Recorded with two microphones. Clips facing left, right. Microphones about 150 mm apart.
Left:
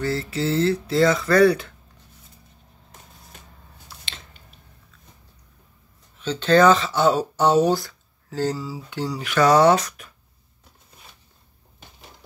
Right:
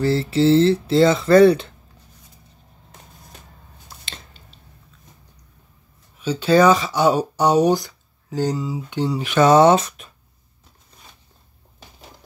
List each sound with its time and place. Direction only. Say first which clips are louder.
0.0 s speech: right 7 dB; 30° right (ahead or behind)
4.0 s a sound: right 3 dB; 30° right (ahead or behind)
6.1 s speech: right 2 dB; 10° right (ahead or behind)